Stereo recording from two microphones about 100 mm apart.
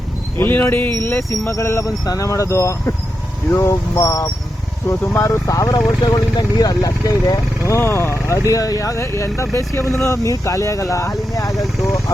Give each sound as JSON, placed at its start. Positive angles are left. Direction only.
{"t": 0.3, "sound": "speech", "side_deg": 20}